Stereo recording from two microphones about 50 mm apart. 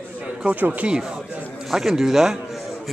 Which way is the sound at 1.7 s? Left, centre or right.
Centre.